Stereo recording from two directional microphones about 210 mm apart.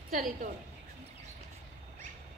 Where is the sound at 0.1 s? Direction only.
40° right (ahead or behind).